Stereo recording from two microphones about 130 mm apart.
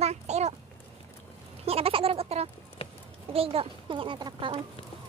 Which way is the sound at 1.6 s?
50° right (ahead or behind).